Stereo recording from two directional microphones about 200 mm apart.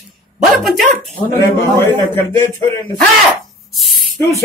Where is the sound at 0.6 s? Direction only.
Centre (ahead or behind).